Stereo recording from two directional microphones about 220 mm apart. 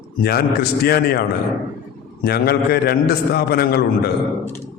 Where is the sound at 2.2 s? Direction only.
45° left (ahead or behind).